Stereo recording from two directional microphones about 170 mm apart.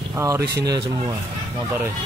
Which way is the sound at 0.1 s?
15° right (ahead or behind).